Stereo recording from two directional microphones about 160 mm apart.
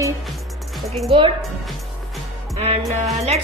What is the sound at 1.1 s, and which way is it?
Speech, 30° right (ahead or behind).